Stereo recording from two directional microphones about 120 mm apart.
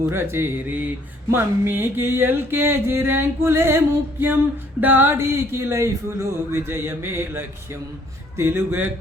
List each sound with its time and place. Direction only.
0.1 s speech: 20° right (ahead or behind)
4.8 s speech: 15° right (ahead or behind)